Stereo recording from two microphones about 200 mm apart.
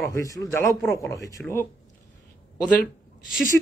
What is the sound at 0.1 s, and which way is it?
Speech, 15° left (ahead or behind).